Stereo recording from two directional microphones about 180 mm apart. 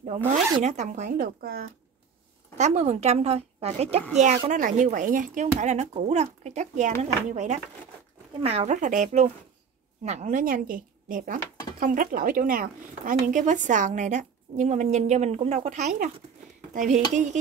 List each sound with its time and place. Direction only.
0.3 s a woman's voice: 40° right (ahead or behind)
2.5 s speech: 40° right (ahead or behind)
4.5 s a woman's voice: 45° right (ahead or behind)